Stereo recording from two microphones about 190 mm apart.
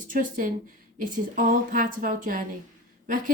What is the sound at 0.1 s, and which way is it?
A woman's voice, 45° right (ahead or behind).